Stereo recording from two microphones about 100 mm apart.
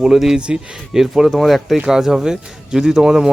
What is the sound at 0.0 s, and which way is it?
Speech, 5° right (ahead or behind).